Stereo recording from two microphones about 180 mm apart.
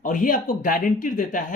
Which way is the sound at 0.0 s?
45° left (ahead or behind).